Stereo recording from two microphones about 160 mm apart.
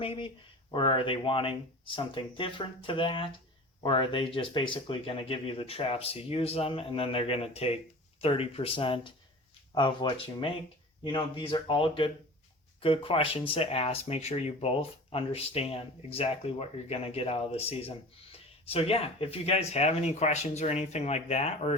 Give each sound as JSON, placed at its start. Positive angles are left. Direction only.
{"t": 0.0, "sound": "speech", "side_deg": 35}